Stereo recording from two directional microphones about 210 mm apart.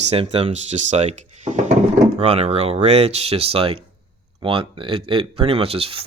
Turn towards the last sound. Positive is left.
turn(degrees=-25)  # may be behind; listen again after turning